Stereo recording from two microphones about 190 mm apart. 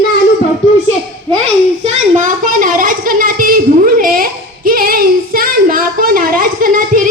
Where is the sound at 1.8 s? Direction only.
40° right (ahead or behind).